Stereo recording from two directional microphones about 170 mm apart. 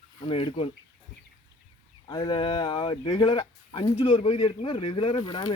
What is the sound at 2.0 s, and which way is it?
Speech, 25° left (ahead or behind).